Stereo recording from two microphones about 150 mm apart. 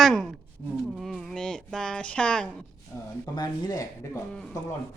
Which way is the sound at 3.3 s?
25° left (ahead or behind).